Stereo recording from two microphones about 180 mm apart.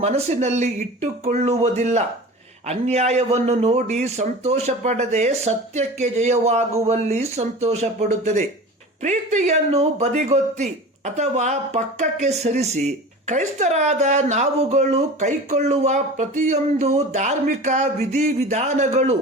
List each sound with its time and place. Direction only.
0.0 s speech: 40° right (ahead or behind)